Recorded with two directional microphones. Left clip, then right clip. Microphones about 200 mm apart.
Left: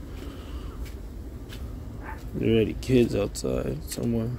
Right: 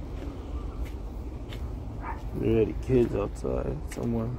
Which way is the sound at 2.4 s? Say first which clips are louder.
Left 2 dB; 60° left (ahead or behind).